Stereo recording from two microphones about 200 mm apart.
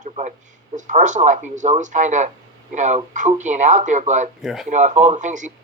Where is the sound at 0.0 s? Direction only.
35° right (ahead or behind).